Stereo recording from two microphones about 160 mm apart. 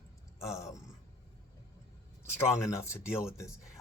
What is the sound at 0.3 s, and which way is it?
Speech, 20° left (ahead or behind).